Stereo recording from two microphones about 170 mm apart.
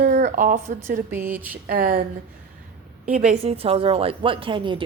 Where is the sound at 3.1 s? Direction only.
5° right (ahead or behind).